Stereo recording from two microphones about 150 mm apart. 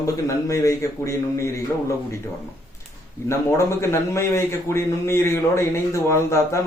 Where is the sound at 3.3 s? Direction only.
20° left (ahead or behind).